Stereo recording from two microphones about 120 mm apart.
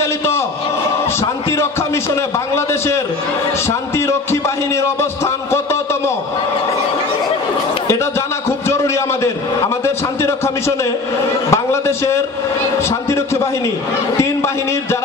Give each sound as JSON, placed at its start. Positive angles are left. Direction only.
{"t": 2.5, "sound": "a man's voice", "side_deg": 20}
{"t": 4.3, "sound": "a man's voice", "side_deg": 25}
{"t": 8.5, "sound": "a sound", "side_deg": 20}
{"t": 9.8, "sound": "a man's voice", "side_deg": 20}
{"t": 11.5, "sound": "a man's voice", "side_deg": 25}